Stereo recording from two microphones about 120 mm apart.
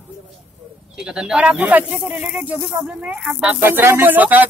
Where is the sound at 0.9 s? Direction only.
5° right (ahead or behind).